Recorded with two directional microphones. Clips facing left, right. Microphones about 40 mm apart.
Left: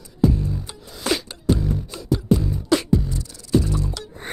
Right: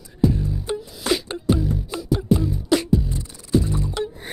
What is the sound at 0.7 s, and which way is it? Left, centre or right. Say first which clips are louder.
Music: right 14 dB; right.